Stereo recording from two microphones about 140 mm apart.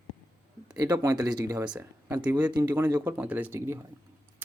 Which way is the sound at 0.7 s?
25° right (ahead or behind).